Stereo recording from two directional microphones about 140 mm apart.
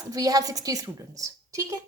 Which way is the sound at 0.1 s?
25° right (ahead or behind).